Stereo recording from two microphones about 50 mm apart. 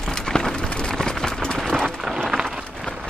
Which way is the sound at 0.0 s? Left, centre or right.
Centre.